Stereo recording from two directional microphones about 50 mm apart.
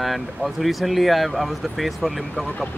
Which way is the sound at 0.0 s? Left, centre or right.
Centre.